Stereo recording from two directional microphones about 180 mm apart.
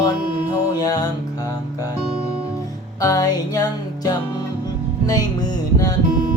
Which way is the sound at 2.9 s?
20° left (ahead or behind).